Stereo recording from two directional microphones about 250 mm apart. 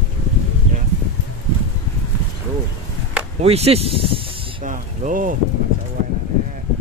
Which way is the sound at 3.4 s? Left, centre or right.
Right.